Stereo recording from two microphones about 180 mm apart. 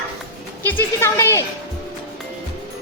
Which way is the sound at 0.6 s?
10° left (ahead or behind).